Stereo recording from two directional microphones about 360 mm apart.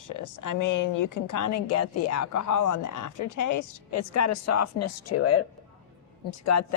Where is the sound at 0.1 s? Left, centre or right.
Left.